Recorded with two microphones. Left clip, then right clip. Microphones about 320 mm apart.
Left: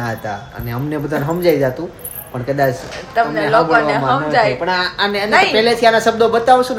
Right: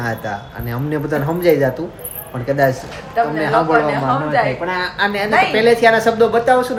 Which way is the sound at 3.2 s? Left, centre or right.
Left.